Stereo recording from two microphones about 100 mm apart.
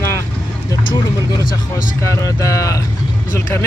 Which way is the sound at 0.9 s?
45° left (ahead or behind).